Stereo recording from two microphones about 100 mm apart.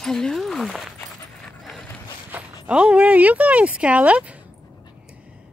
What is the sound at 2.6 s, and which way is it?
Speech, 10° right (ahead or behind).